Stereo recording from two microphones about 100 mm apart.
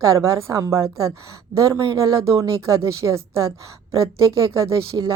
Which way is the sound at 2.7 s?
30° right (ahead or behind).